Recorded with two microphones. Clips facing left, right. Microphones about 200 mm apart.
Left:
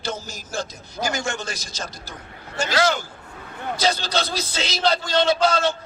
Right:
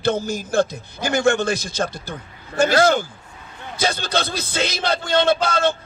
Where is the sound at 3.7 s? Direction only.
55° right (ahead or behind).